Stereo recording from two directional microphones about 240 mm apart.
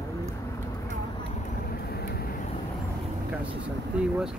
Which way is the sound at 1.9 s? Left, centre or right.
Left.